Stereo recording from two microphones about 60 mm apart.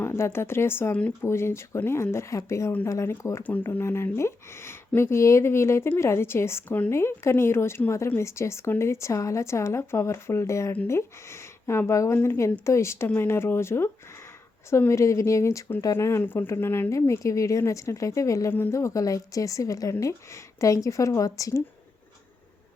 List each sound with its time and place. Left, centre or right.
0.0 s a sound: left
0.3 s speech: left
3.4 s speech: left
3.8 s speech: left
6.7 s speech: left
6.9 s speech: left
12.1 s speech: left
12.4 s a woman's voice: left
16.2 s speech: left
16.9 s a woman's voice: left